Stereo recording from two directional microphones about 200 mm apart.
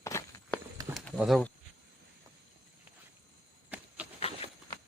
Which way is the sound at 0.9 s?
Centre (ahead or behind).